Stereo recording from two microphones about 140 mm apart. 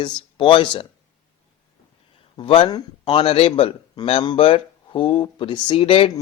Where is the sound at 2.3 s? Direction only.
40° left (ahead or behind).